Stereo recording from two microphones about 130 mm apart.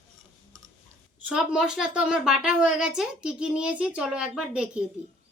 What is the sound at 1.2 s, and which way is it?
A woman's voice, 5° right (ahead or behind).